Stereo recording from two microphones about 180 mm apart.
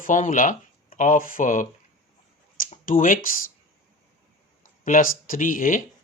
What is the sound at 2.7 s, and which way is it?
Speech, 50° left (ahead or behind).